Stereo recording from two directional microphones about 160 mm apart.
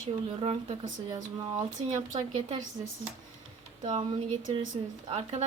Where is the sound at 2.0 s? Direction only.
45° right (ahead or behind).